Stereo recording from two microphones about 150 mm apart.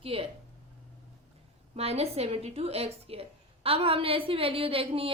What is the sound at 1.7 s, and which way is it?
A woman's voice, 40° right (ahead or behind).